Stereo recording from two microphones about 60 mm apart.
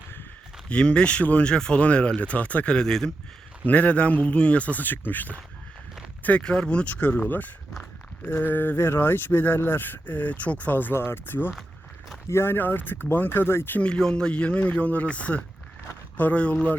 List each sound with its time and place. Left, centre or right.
0.7 s a man's voice: centre
1.5 s a man's voice: centre
3.7 s a man's voice: left
6.4 s a man's voice: centre; by 13.7 s left
13.7 s a man's voice: centre